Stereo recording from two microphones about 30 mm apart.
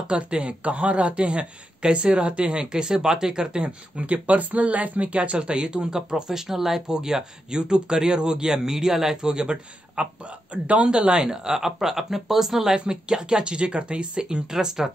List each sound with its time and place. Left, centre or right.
0.1 s speech: right
3.6 s speech: right
5.0 s speech: right
10.5 s speech: right
11.2 s speech: centre
12.7 s speech: right
14.5 s speech: centre